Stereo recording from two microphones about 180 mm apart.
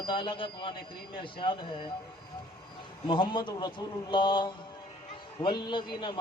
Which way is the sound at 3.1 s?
25° left (ahead or behind).